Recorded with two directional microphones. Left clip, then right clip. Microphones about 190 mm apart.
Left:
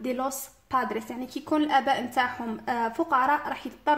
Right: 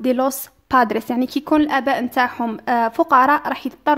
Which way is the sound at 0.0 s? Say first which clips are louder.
Right 11 dB; 50° right (ahead or behind).